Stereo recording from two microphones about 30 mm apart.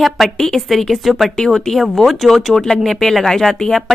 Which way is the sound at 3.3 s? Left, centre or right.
Centre.